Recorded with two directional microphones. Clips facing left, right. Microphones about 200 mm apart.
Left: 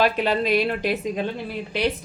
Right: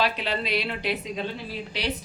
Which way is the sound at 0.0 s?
50° left (ahead or behind).